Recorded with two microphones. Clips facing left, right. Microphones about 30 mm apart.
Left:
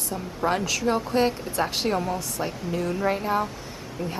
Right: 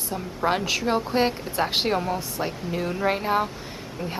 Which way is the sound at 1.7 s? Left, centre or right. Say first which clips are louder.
Right 2 dB; right.